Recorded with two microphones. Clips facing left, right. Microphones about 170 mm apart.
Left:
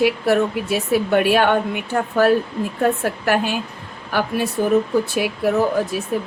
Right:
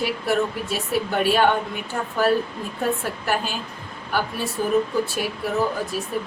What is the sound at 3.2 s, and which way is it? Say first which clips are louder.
A woman's voice: left 6 dB; 70° left (ahead or behind).